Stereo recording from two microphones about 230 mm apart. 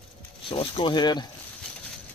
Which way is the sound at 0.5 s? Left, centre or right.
Left.